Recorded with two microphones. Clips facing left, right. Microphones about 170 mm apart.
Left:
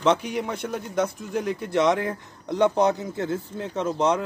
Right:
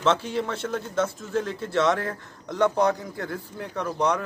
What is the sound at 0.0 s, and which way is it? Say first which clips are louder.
A man's voice: left 1 dB; 15° left (ahead or behind).